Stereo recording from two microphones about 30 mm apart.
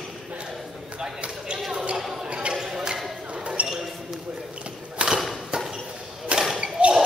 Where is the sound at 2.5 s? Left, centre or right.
Centre.